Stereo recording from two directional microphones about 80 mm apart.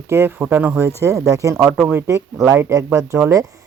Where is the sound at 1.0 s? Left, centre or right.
Right.